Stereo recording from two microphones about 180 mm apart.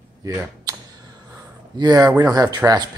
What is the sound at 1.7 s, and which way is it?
Speech, 20° right (ahead or behind).